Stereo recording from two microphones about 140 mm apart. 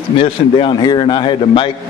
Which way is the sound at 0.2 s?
35° left (ahead or behind).